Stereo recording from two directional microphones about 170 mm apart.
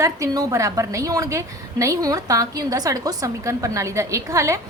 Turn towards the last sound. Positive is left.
turn(degrees=-20)  # may be behind; listen again after turning